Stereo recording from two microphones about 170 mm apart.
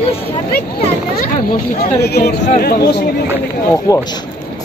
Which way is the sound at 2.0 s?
70° left (ahead or behind).